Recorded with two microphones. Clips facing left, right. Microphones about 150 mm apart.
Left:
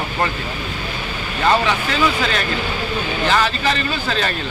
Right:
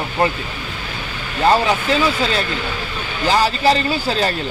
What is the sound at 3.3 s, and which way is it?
Speech, 35° right (ahead or behind).